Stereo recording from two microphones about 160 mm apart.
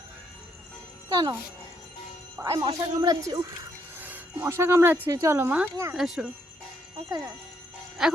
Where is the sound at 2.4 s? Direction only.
30° right (ahead or behind); by 6.3 s centre (ahead or behind).